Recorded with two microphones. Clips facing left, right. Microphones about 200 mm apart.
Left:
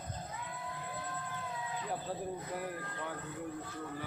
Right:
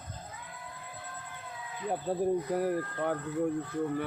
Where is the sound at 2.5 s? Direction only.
50° right (ahead or behind).